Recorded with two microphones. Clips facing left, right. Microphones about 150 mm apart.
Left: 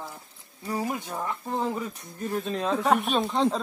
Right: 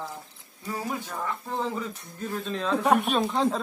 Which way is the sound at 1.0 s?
15° left (ahead or behind).